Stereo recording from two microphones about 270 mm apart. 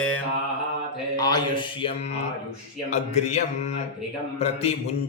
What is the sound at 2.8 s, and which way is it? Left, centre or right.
Speech, left.